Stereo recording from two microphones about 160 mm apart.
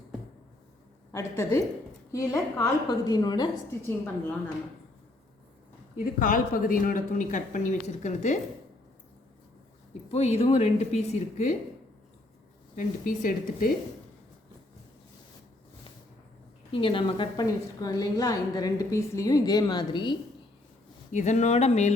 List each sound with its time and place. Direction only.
1.1 s a woman's voice: 15° left (ahead or behind)
6.1 s speech: 60° left (ahead or behind)
10.1 s speech: 40° left (ahead or behind)
12.7 s speech: 55° left (ahead or behind)
16.7 s a woman's voice: 35° left (ahead or behind)
21.1 s speech: 50° left (ahead or behind)